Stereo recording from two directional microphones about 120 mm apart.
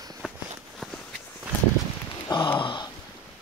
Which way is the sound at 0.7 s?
5° left (ahead or behind).